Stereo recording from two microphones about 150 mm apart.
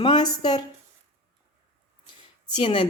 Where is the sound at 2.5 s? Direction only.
35° left (ahead or behind).